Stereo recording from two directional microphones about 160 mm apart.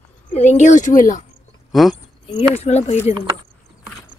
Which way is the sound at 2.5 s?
45° left (ahead or behind).